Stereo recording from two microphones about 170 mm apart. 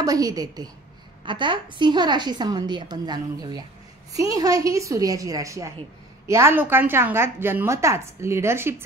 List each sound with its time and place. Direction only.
0.0 s a woman's voice: 20° right (ahead or behind)